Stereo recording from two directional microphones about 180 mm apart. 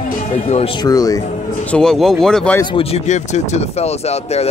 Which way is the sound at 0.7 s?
20° left (ahead or behind).